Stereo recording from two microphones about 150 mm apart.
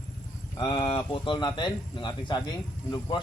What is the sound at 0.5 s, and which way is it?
A man's voice, 35° left (ahead or behind).